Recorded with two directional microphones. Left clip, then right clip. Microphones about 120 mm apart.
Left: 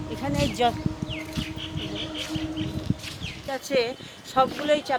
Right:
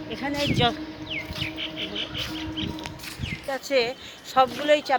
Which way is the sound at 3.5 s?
25° right (ahead or behind).